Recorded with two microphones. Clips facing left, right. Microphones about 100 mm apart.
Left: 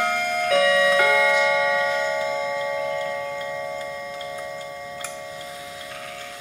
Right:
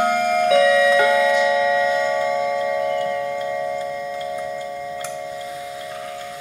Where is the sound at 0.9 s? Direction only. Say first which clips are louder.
Right 3 dB; 30° left (ahead or behind).